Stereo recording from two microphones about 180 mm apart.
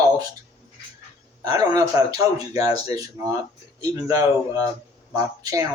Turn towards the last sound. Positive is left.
turn(degrees=-20)  # may be behind; listen again after turning